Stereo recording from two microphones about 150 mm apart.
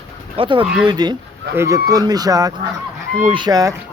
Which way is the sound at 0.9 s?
30° right (ahead or behind).